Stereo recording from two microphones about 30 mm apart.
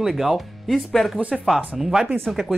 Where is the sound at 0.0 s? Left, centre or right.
Centre.